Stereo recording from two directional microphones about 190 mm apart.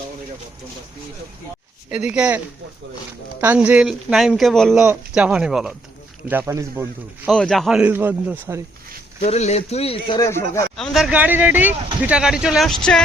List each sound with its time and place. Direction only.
1.9 s a man's voice: 5° right (ahead or behind)
3.4 s speech: 5° right (ahead or behind)
6.3 s a man's voice: 15° right (ahead or behind)
7.3 s a man's voice: 5° left (ahead or behind); by 8.6 s 10° right (ahead or behind)
9.2 s speech: 35° left (ahead or behind)
10.2 s speech: 15° left (ahead or behind)
10.8 s a man's voice: centre (ahead or behind)